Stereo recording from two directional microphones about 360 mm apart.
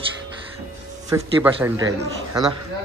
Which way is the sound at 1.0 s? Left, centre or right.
Centre.